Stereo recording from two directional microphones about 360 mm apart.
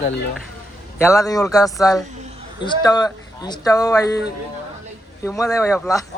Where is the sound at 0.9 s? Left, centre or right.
Centre.